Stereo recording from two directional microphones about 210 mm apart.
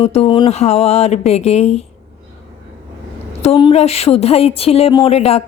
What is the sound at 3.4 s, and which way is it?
Speech, 25° left (ahead or behind).